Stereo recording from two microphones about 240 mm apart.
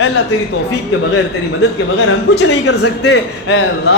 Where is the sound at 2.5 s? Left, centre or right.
Left.